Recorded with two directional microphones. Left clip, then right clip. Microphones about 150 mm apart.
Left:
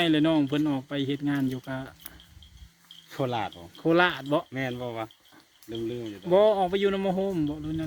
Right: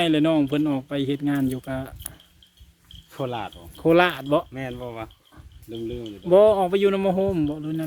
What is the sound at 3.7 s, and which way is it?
Speech, 30° right (ahead or behind).